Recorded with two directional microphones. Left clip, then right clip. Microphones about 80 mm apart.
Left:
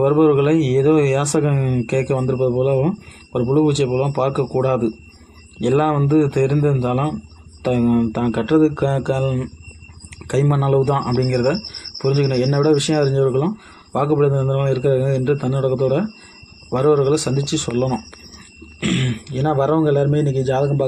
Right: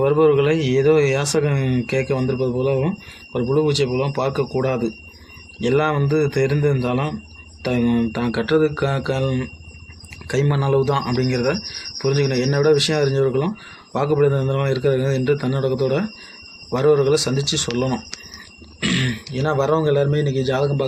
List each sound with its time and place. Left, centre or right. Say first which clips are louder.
0.0 s speech: left 1 dB; left
1.5 s a man's voice: left 1 dB; left
1.9 s a man's voice: left 2 dB; left; by 9.5 s centre
10.2 s speech: left 2 dB; left
10.5 s a man's voice: left 1 dB; left
18.8 s throat clearing: right 1 dB; left
19.3 s a man's voice: left 2 dB; left